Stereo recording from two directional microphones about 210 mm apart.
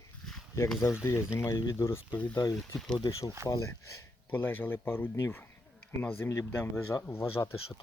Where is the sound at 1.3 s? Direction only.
10° left (ahead or behind).